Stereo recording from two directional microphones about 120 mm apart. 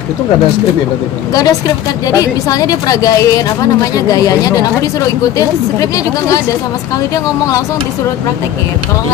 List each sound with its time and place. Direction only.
1.3 s a woman's voice: 30° left (ahead or behind)
5.8 s a woman's voice: 30° left (ahead or behind)